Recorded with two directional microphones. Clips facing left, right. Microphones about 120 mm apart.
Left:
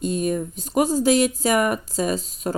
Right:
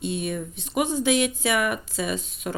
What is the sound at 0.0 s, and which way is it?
Speech, 40° left (ahead or behind).